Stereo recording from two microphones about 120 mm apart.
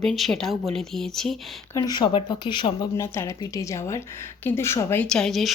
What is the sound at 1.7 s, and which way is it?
Speech, 35° left (ahead or behind).